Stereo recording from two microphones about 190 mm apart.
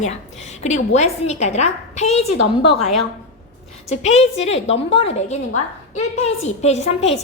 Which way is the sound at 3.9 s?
35° left (ahead or behind).